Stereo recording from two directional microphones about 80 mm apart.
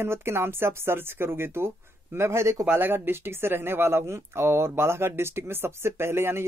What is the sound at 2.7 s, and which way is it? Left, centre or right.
Speech, right.